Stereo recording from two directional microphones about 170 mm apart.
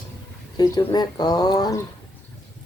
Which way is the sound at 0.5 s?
20° left (ahead or behind).